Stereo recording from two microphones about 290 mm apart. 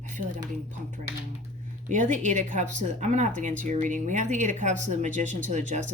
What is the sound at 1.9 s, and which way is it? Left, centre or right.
Speech, right.